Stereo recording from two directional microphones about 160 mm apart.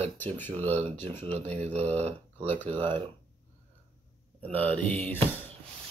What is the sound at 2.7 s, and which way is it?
Speech, 30° right (ahead or behind).